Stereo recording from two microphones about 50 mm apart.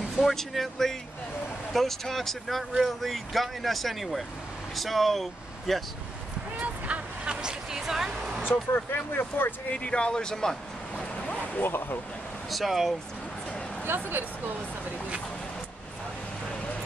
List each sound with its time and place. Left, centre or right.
0.2 s speech: centre
6.6 s vehicle: right
7.4 s a sound: centre
8.5 s speech: left
9.7 s speech: left
11.6 s speech: left
12.4 s speech: centre
13.8 s speech: right